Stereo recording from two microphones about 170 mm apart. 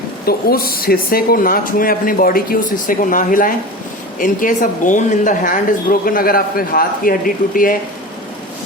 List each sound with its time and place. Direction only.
0.3 s speech: 65° left (ahead or behind)